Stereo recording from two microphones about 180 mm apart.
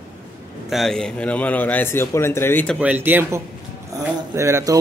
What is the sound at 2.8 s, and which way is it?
Speech, 10° right (ahead or behind).